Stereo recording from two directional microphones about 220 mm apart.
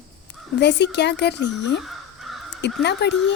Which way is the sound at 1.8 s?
Centre (ahead or behind).